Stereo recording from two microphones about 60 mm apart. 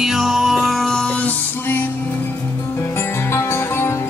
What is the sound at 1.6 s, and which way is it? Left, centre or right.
Music, left.